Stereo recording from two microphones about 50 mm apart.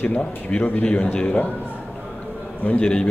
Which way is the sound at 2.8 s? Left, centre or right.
Centre.